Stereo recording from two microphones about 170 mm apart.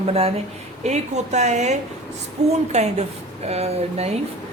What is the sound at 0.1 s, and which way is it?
A woman's voice, 35° right (ahead or behind).